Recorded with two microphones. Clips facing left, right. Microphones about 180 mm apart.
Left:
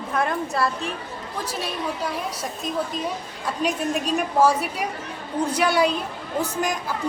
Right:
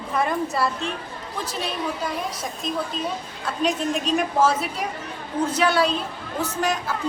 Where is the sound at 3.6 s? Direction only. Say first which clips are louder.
Right 1 dB; 10° left (ahead or behind).